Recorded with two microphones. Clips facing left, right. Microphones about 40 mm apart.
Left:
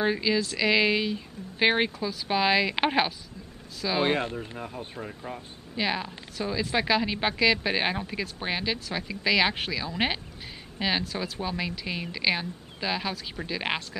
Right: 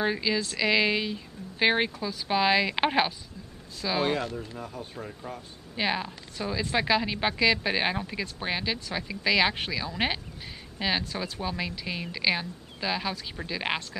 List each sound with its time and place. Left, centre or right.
0.0 s a woman's voice: centre
4.0 s speech: left
4.9 s speech: centre
5.8 s a woman's voice: centre